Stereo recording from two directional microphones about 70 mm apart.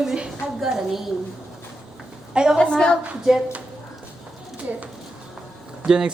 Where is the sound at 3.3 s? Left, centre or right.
Centre.